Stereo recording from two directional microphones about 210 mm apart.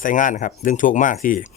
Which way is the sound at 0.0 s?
40° left (ahead or behind).